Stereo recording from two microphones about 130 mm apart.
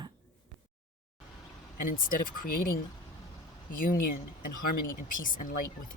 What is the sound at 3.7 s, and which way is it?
Speech, 90° left.